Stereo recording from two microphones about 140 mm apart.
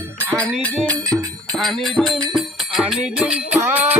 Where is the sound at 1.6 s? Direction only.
Centre (ahead or behind).